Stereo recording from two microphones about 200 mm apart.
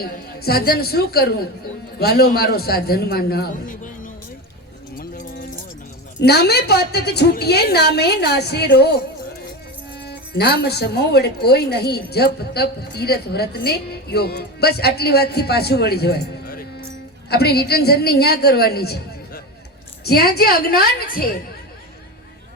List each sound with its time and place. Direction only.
0.0 s speech: 50° left (ahead or behind)
4.9 s a sound: 45° left (ahead or behind)
6.1 s speech: 55° left (ahead or behind)
10.1 s speech: 55° left (ahead or behind)